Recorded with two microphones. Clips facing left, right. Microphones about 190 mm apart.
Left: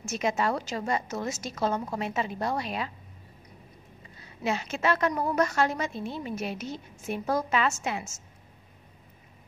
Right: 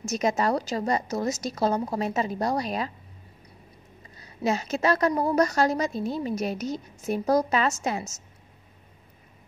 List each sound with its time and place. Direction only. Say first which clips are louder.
0.0 s a woman's voice: right 3 dB; 40° right (ahead or behind)
4.2 s a woman's voice: right 4 dB; 40° right (ahead or behind)